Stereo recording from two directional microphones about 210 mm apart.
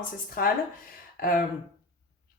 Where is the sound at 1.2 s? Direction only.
40° left (ahead or behind).